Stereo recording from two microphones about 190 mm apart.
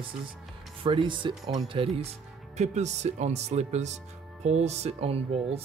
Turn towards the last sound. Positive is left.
turn(degrees=-30)  # may be behind; listen again after turning